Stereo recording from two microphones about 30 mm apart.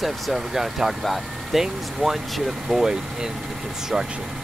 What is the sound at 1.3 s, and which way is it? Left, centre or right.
Vehicle, centre.